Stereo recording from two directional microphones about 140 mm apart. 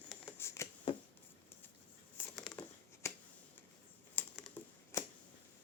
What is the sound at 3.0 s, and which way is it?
Finger snapping, 20° left (ahead or behind).